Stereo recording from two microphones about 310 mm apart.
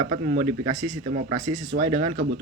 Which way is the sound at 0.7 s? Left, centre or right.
Centre.